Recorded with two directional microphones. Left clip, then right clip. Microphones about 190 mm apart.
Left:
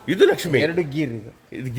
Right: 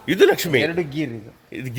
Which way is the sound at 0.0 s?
15° right (ahead or behind).